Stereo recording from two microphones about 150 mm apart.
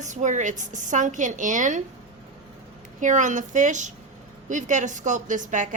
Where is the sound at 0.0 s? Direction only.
55° right (ahead or behind).